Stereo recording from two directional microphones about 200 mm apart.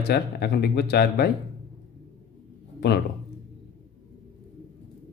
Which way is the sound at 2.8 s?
55° left (ahead or behind).